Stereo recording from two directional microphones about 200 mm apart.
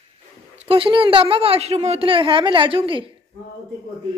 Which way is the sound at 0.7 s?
25° right (ahead or behind).